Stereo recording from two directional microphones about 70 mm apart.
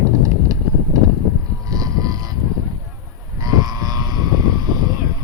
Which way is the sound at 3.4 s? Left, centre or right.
Right.